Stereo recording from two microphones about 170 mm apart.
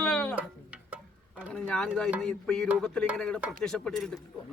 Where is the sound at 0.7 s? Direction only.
10° right (ahead or behind).